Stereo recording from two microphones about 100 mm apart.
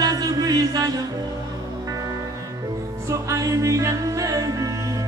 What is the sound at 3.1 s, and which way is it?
Music, 30° right (ahead or behind).